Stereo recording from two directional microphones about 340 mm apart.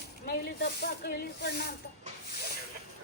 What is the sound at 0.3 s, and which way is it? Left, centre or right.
Speech, left.